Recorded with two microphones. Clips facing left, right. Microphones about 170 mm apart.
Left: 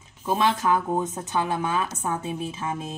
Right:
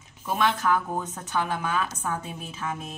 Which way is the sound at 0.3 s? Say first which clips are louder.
Left 2 dB; 25° left (ahead or behind).